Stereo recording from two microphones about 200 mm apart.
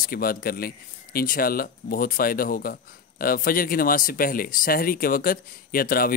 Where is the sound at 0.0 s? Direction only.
45° left (ahead or behind).